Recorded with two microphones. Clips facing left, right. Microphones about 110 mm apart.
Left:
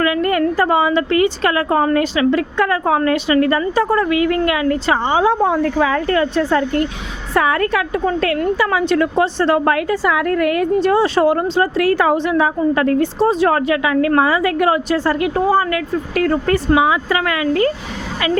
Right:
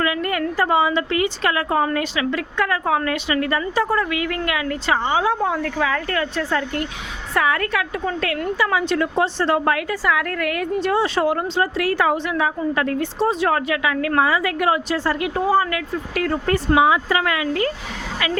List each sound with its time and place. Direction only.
0.2 s a woman's voice: 40° left (ahead or behind); by 9.7 s 60° left (ahead or behind)
9.9 s a woman's voice: 25° left (ahead or behind); by 12.1 s 45° left (ahead or behind)
12.1 s a woman's voice: 30° left (ahead or behind); by 16.4 s 45° left (ahead or behind)
17.1 s speech: 65° left (ahead or behind); by 17.7 s 50° left (ahead or behind)